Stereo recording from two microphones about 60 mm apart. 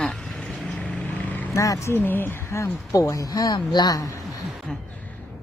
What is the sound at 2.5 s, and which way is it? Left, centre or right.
Speech, left.